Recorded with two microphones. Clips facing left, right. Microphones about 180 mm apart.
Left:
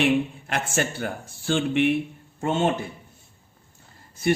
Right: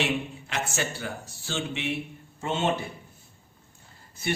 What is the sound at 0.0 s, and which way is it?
A man's voice, 55° left (ahead or behind).